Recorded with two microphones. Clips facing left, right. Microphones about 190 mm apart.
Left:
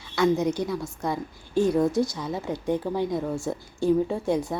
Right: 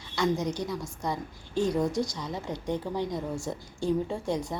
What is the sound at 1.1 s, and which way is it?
A woman's voice, 5° left (ahead or behind).